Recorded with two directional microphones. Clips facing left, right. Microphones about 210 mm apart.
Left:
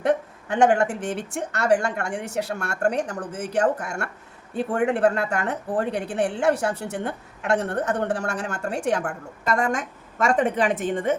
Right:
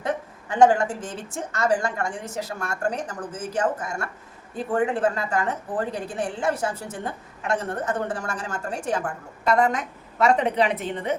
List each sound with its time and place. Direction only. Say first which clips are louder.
0.0 s speech: left 6 dB; 65° left (ahead or behind)
9.5 s a woman's voice: right 2 dB; 50° left (ahead or behind)